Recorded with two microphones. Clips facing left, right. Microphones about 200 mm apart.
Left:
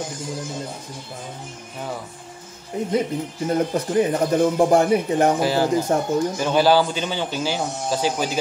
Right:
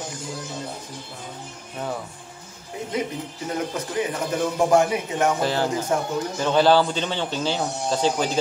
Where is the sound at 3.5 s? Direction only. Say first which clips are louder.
Left 7 dB; 40° left (ahead or behind).